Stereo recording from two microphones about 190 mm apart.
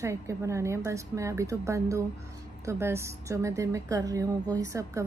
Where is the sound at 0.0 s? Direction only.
15° right (ahead or behind).